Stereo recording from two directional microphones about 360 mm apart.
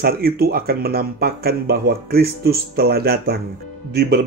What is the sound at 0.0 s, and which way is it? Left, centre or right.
Speech, right.